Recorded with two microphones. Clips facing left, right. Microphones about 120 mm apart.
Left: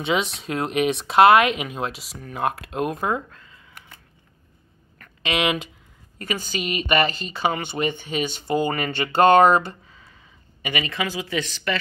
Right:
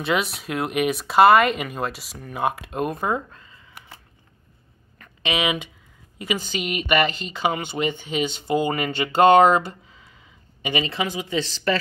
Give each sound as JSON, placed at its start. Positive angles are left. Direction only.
{"t": 0.0, "sound": "speech", "side_deg": -5}
{"t": 3.3, "sound": "a sound", "side_deg": -5}
{"t": 5.2, "sound": "a woman's voice", "side_deg": 0}
{"t": 11.4, "sound": "speech", "side_deg": -35}